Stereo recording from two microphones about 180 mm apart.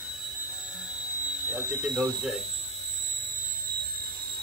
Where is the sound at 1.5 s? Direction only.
Centre (ahead or behind).